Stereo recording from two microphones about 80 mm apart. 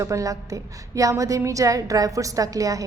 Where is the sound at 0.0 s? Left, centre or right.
Right.